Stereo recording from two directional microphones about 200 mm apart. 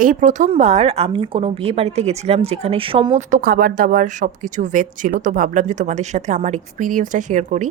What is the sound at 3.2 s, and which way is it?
Speech, 45° right (ahead or behind).